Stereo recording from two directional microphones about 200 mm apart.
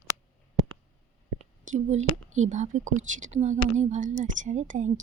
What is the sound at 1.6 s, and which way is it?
A woman's voice, 35° right (ahead or behind).